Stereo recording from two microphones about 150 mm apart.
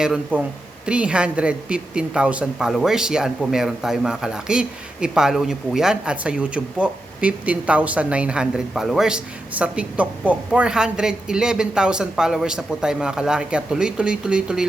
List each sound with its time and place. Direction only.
0.0 s a woman's voice: 5° right (ahead or behind)